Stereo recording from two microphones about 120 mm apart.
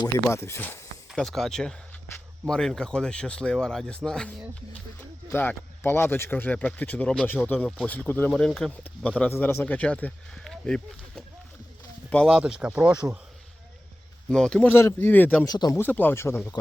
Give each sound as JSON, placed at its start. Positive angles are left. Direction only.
{"t": 0.3, "sound": "speech", "side_deg": 20}
{"t": 1.1, "sound": "speech", "side_deg": 5}
{"t": 8.3, "sound": "speech", "side_deg": 5}
{"t": 9.3, "sound": "speech", "side_deg": 20}
{"t": 12.3, "sound": "speech", "side_deg": -5}
{"t": 14.3, "sound": "speech", "side_deg": 5}
{"t": 14.7, "sound": "speech", "side_deg": 20}
{"t": 15.4, "sound": "speech", "side_deg": 35}
{"t": 15.7, "sound": "speech", "side_deg": 15}